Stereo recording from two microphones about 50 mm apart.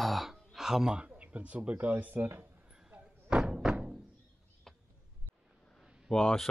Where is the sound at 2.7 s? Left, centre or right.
Centre.